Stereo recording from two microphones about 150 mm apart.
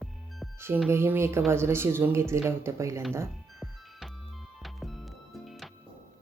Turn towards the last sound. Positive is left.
turn(degrees=0)  # may be behind; listen again after turning